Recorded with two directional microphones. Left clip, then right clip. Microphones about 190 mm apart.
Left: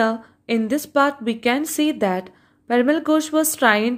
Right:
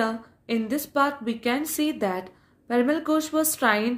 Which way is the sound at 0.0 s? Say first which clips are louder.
Left 7 dB; 45° left (ahead or behind).